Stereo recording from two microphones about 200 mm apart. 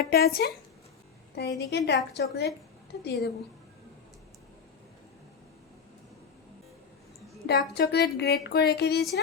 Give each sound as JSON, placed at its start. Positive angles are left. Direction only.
{"t": 0.0, "sound": "speech", "side_deg": 50}
{"t": 7.4, "sound": "speech", "side_deg": 55}